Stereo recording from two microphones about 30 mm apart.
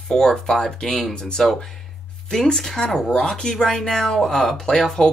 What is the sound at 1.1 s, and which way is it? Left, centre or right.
Speech, left.